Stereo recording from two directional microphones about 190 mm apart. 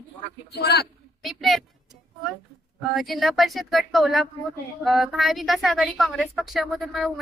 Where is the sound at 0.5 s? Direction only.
60° left (ahead or behind).